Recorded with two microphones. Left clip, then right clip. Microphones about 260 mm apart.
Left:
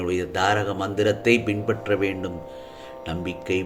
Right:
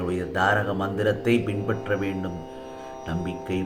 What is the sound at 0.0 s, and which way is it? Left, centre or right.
Speech, left.